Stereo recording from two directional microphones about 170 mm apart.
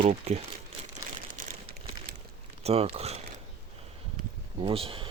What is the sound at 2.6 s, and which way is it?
Speech, 35° right (ahead or behind).